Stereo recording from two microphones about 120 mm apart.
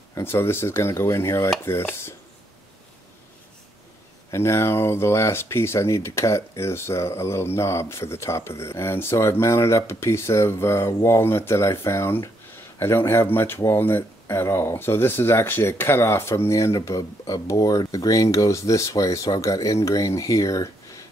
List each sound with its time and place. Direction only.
0.1 s speech: 20° left (ahead or behind)
4.3 s speech: 25° left (ahead or behind)